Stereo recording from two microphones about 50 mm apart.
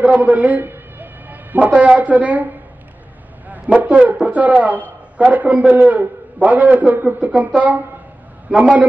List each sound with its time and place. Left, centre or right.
0.0 s a man's voice: right
0.7 s music: right
1.7 s a man's voice: right